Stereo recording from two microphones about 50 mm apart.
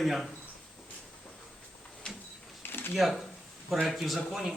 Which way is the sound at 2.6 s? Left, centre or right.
Left.